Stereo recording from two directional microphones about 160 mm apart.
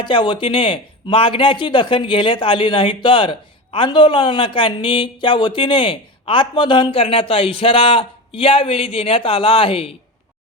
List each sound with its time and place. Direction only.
0.0 s a man's voice: 30° left (ahead or behind)